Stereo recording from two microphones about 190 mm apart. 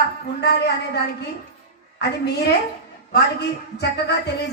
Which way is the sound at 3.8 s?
60° left (ahead or behind).